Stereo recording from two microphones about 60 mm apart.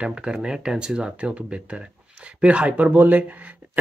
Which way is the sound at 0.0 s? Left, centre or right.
Centre.